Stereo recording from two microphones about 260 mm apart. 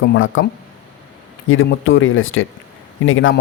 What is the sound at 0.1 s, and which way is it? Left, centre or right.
Speech, left.